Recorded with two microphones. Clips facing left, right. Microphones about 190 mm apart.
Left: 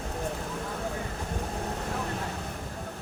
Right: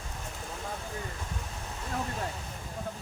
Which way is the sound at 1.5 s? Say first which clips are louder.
Left 9 dB; 60° left (ahead or behind).